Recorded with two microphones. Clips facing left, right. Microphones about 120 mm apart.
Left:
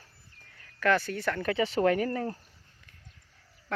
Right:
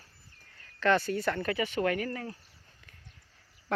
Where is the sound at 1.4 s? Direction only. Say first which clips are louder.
Left 3 dB; 25° left (ahead or behind).